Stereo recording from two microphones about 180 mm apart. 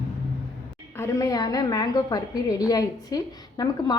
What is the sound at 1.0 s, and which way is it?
A woman's voice, 15° left (ahead or behind).